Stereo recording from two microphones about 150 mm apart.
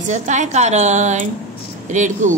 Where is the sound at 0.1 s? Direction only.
55° right (ahead or behind).